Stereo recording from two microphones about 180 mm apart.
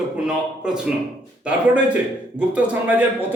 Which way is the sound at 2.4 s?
10° right (ahead or behind).